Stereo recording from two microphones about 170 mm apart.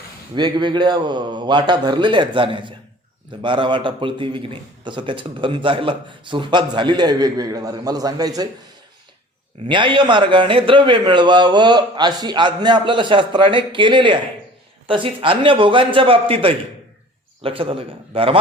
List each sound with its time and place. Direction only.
0.3 s a man's voice: 25° right (ahead or behind)
9.6 s a man's voice: 30° right (ahead or behind)